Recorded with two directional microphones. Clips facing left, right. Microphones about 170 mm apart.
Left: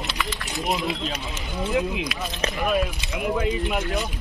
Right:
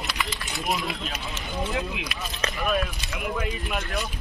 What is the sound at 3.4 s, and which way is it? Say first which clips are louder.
Speech: left 6 dB; 20° left (ahead or behind).